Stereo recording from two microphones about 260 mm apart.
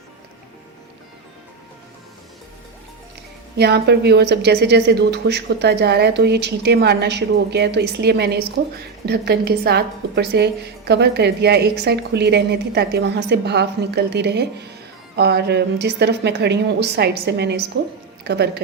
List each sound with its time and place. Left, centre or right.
3.6 s a woman's voice: right